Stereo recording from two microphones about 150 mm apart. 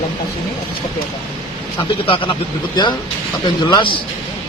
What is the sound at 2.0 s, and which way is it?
Speech, 35° left (ahead or behind).